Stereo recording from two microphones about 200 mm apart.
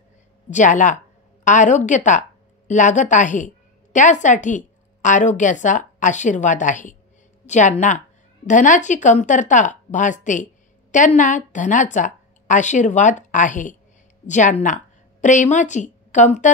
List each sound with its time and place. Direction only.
0.5 s a woman's voice: 40° left (ahead or behind)